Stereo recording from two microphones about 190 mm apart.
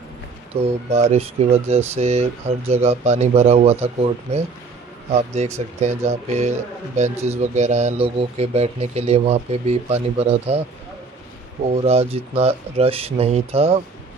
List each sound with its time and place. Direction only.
0.6 s speech: 30° right (ahead or behind)
5.4 s speech: 35° right (ahead or behind)
11.7 s speech: 30° right (ahead or behind)